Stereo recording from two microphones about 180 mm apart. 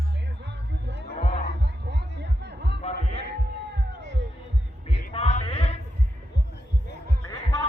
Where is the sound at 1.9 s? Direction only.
70° right (ahead or behind).